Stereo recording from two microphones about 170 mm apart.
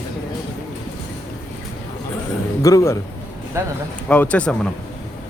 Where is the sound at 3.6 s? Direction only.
15° right (ahead or behind).